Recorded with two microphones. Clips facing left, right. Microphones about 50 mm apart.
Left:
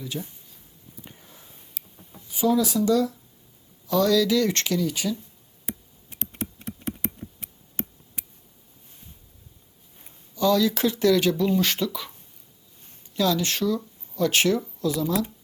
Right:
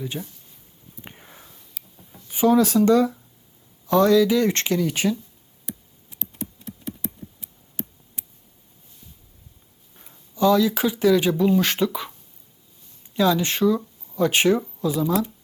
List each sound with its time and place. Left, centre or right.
0.0 s speech: right
1.0 s sniff: right
2.2 s speech: right
3.8 s speech: right
4.9 s speech: right
5.6 s computer keyboard: left
6.6 s a sound: left
10.1 s speech: right
13.1 s speech: right
15.0 s speech: centre